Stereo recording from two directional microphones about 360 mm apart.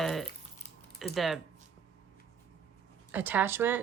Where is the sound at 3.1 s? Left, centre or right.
Centre.